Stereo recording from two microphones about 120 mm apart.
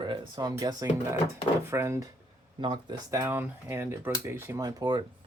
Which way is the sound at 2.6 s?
40° right (ahead or behind).